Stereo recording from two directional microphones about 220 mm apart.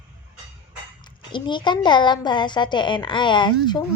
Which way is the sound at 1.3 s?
20° left (ahead or behind).